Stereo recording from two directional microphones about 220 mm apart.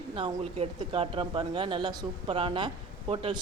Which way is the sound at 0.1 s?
20° right (ahead or behind).